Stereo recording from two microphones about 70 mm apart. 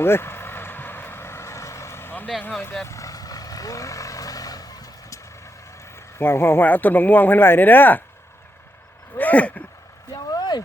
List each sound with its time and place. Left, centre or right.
0.0 s vehicle: left
2.8 s vehicle: left
5.8 s a sound: left
6.7 s speech: left
9.1 s speech: left
10.2 s vehicle: left